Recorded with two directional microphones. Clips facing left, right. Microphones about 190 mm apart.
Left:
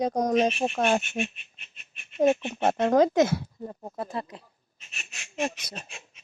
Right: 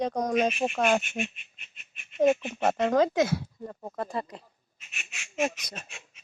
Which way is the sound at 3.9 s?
5° left (ahead or behind).